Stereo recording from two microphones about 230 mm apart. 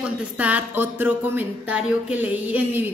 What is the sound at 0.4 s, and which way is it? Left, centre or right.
Speech, centre.